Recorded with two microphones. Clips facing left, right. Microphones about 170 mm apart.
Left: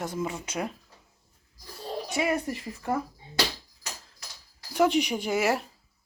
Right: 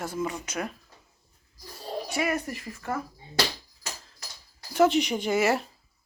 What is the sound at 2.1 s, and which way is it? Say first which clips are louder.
Speech: left 2 dB; 25° left (ahead or behind).